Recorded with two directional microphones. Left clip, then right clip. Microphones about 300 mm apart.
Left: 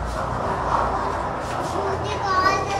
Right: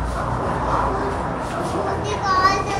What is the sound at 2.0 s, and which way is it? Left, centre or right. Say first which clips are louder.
Children playing: right 4 dB; right.